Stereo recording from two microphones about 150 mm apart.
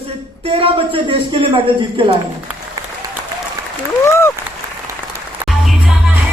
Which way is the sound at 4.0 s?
15° left (ahead or behind).